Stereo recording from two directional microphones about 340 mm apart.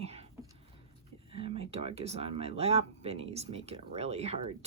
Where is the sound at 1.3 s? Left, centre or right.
Centre.